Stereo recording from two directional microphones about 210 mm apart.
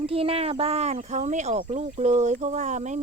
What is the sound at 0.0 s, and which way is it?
Speech, 25° right (ahead or behind).